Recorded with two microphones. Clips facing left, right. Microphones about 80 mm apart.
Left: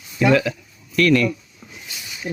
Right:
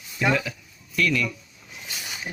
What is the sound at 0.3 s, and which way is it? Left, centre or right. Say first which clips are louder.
Speech: left 7 dB; left.